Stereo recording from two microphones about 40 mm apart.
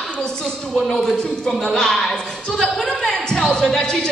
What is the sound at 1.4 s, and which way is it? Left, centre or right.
Speech, centre.